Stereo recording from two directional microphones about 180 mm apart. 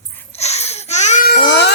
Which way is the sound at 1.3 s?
65° left (ahead or behind).